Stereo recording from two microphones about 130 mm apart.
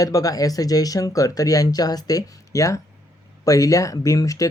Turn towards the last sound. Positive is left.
turn(degrees=25)  # may be behind; listen again after turning